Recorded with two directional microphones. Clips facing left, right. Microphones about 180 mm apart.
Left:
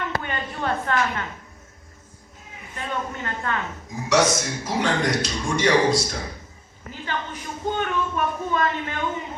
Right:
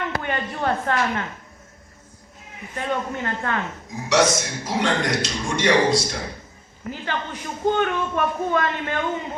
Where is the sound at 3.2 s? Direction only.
40° right (ahead or behind).